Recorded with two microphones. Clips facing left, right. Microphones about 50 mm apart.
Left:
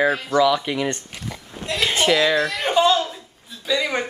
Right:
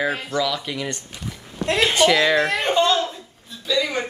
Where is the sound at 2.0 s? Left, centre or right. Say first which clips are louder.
Right 2 dB; left.